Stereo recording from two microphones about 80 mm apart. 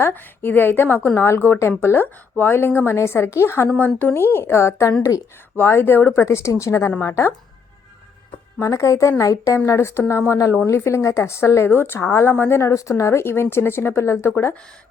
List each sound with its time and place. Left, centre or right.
0.0 s a woman's voice: left
8.5 s a woman's voice: left